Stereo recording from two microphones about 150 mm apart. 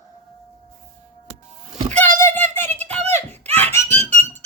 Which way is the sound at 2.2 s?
15° left (ahead or behind).